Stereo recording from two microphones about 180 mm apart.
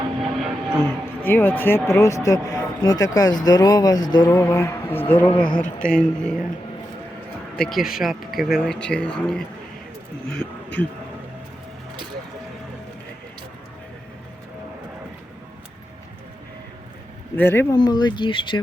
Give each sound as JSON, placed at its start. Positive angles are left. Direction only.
{"t": 0.3, "sound": "speech", "side_deg": 5}
{"t": 5.3, "sound": "speech", "side_deg": 25}
{"t": 5.6, "sound": "speech", "side_deg": 5}
{"t": 7.5, "sound": "speech", "side_deg": 0}
{"t": 17.3, "sound": "speech", "side_deg": 10}
{"t": 17.7, "sound": "speech", "side_deg": 25}